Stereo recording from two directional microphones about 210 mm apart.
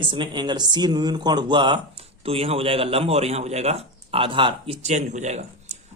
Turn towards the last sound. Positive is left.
turn(degrees=-30)  # may be behind; listen again after turning